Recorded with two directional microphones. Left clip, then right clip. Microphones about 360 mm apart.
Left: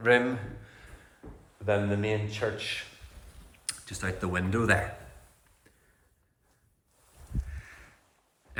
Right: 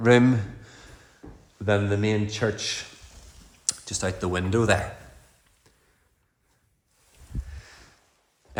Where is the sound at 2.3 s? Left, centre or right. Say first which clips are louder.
Right 4 dB; centre.